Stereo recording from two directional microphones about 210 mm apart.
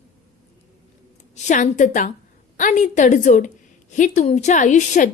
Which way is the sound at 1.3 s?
35° left (ahead or behind).